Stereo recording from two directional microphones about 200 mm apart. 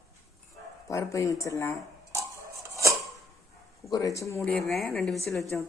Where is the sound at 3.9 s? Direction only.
15° left (ahead or behind).